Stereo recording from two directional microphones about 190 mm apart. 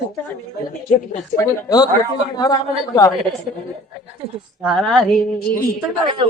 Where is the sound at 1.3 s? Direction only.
20° left (ahead or behind).